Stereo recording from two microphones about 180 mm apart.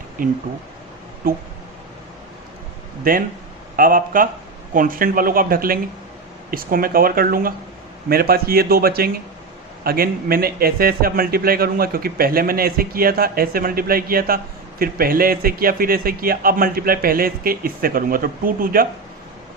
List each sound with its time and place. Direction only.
0.2 s speech: 50° right (ahead or behind)
3.0 s a man's voice: 50° right (ahead or behind)